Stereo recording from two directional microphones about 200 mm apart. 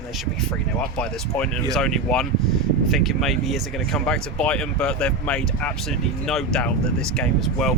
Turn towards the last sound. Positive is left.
turn(degrees=0)  # may be behind; listen again after turning